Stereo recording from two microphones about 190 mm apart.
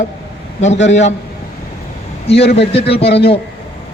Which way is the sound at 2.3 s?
60° left (ahead or behind).